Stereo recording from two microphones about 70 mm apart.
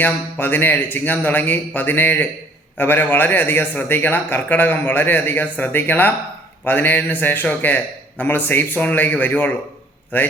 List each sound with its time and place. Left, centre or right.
0.0 s a man's voice: left